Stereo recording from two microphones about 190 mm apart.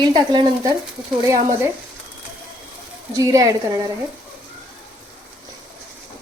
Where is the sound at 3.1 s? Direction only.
15° right (ahead or behind).